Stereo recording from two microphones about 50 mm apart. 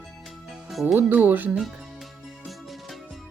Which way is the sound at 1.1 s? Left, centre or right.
Right.